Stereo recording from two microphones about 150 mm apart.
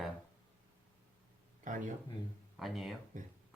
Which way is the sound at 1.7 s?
60° right (ahead or behind).